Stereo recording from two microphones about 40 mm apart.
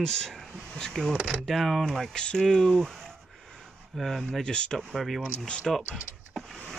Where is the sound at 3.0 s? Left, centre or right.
Centre.